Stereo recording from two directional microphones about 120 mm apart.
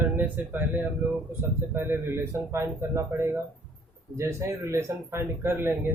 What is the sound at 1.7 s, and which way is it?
Speech, 20° right (ahead or behind).